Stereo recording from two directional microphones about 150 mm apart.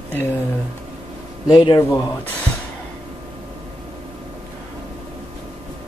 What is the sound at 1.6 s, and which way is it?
Speech, 25° left (ahead or behind).